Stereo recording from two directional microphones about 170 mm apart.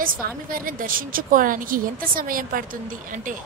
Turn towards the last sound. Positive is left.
turn(degrees=-50)  # may be behind; listen again after turning